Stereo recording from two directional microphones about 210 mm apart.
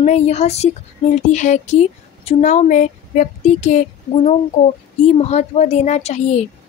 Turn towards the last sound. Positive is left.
turn(degrees=35)  # may be behind; listen again after turning